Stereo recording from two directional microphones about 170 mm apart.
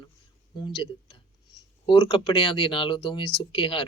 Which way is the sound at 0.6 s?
30° left (ahead or behind).